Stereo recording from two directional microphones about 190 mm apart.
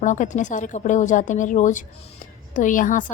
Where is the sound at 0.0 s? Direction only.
40° left (ahead or behind).